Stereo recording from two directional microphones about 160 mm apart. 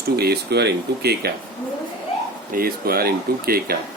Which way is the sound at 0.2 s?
85° right.